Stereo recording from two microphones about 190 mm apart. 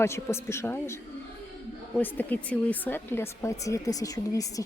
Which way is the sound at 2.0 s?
10° left (ahead or behind).